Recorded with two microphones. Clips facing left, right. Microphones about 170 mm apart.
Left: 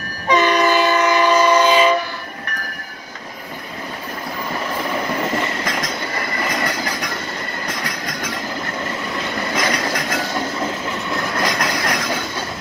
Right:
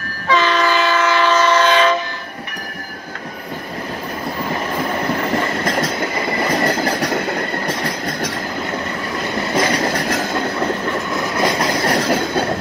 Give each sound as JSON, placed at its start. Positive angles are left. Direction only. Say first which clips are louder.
{"t": 0.3, "sound": "train", "louder": "left 1 dB", "side_deg": 15}
{"t": 6.5, "sound": "train", "louder": "right 7 dB", "side_deg": -30}
{"t": 7.1, "sound": "train", "louder": "right 8 dB", "side_deg": -60}
{"t": 9.6, "sound": "vehicle", "louder": "right 5 dB", "side_deg": -35}
{"t": 11.4, "sound": "train", "louder": "right 6 dB", "side_deg": -30}
{"t": 12.1, "sound": "train", "louder": "right 7 dB", "side_deg": -60}